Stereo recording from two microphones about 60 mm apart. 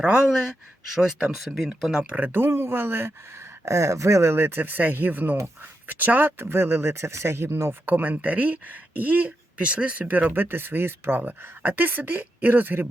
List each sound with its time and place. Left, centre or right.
0.0 s speech: centre
2.0 s speech: right
2.3 s speech: right
3.7 s speech: right
11.2 s speech: right